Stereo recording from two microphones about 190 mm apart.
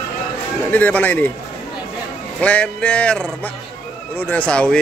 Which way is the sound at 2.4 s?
5° left (ahead or behind).